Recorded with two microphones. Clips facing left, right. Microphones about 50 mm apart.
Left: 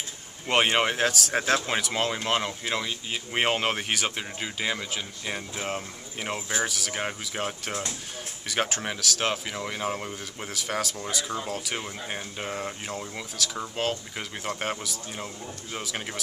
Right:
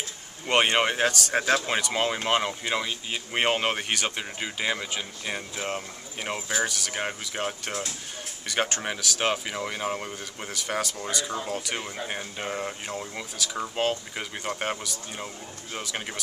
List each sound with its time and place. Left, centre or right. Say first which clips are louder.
0.5 s speech: right 1 dB; centre